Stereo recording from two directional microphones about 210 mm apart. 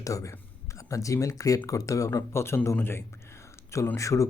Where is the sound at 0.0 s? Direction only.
15° left (ahead or behind).